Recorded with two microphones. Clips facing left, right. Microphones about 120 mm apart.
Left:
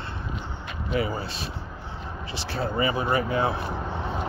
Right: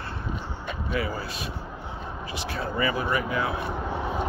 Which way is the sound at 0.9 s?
25° left (ahead or behind).